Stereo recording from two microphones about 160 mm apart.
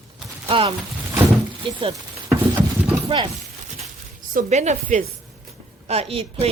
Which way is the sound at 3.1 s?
35° right (ahead or behind).